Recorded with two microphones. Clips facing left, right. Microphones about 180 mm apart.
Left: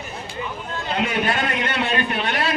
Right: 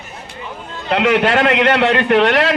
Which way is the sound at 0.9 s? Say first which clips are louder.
Right 9 dB; 85° right.